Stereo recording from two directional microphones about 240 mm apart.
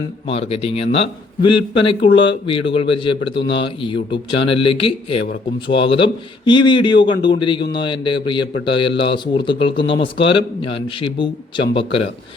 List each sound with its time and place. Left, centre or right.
0.3 s speech: left
2.1 s speech: left
3.3 s speech: left
3.6 s speech: left